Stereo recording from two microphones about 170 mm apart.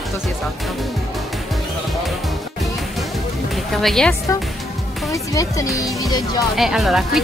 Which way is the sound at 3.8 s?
5° left (ahead or behind).